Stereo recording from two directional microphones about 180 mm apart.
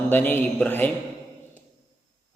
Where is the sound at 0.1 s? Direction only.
10° left (ahead or behind).